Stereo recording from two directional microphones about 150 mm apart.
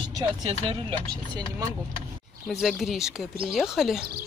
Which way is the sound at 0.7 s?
35° right (ahead or behind).